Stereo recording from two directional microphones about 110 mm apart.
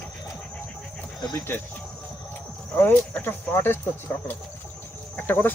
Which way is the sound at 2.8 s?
20° left (ahead or behind).